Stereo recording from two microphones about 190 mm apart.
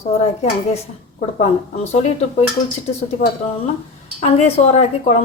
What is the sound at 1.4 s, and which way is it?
A woman's voice, 35° left (ahead or behind).